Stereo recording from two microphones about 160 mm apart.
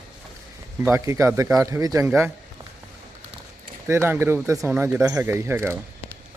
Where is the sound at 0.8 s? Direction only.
15° right (ahead or behind).